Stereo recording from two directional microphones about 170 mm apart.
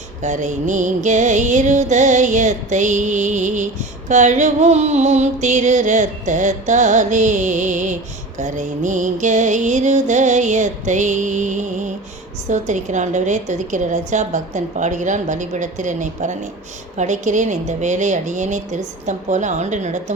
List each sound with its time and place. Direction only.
0.2 s music: 45° right (ahead or behind)